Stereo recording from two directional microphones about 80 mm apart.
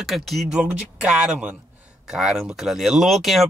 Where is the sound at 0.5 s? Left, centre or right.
Centre.